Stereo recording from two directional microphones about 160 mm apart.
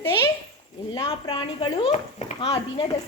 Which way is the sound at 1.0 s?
30° left (ahead or behind).